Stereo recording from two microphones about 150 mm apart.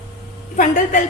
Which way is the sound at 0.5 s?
60° left (ahead or behind).